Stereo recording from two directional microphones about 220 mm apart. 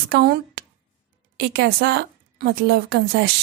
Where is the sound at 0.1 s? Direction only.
45° right (ahead or behind).